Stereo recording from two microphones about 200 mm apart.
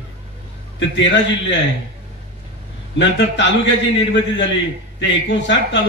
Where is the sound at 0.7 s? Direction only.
65° left (ahead or behind).